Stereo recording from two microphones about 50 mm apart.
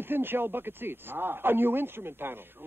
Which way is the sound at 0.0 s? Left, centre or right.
Right.